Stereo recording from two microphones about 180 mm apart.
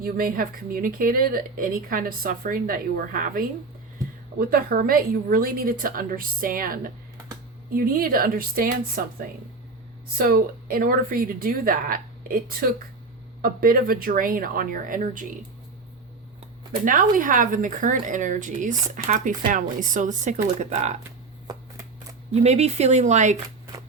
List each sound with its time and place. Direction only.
0.0 s speech: 55° right (ahead or behind)
10.2 s speech: 55° right (ahead or behind)
16.8 s speech: 50° right (ahead or behind)
22.3 s speech: 35° right (ahead or behind)